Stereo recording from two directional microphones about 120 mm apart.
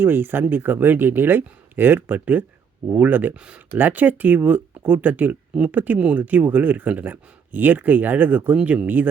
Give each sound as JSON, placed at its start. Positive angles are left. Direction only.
{"t": 0.0, "sound": "speech", "side_deg": -15}